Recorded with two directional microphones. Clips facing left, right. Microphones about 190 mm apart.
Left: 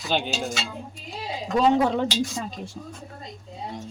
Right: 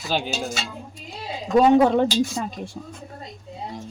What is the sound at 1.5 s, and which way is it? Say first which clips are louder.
Speech: right 5 dB; 55° right (ahead or behind).